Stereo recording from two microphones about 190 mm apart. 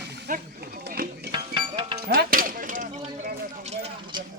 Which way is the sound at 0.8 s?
55° right (ahead or behind).